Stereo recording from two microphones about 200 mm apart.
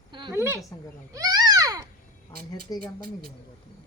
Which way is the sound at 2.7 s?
20° left (ahead or behind).